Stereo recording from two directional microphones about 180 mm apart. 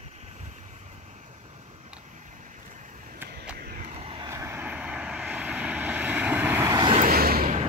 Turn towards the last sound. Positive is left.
turn(degrees=-55)  # may be behind; listen again after turning